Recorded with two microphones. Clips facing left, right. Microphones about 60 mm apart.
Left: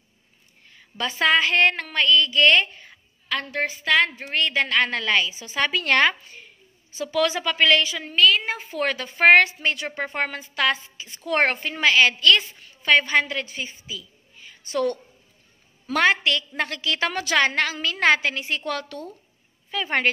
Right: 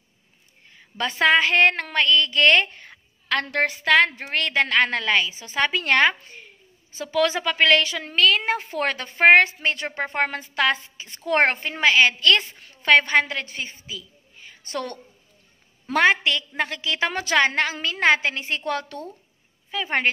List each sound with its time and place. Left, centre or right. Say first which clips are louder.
1.2 s a sound: right 2 dB; right
3.8 s a woman's voice: right 2 dB; right
7.9 s a sound: left 1 dB; right
8.7 s a woman's voice: even; right
9.2 s a woman's voice: even; right
12.5 s a woman's voice: right 2 dB; right
14.6 s a woman's voice: left 6 dB; right
15.9 s a woman's voice: right 1 dB; right
19.7 s a woman's voice: even; centre